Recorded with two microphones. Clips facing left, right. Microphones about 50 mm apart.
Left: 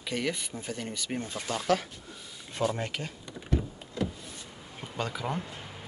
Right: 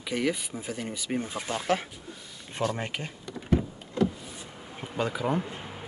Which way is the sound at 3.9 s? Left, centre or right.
Centre.